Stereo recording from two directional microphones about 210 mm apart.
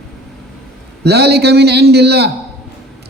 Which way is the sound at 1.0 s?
50° right (ahead or behind).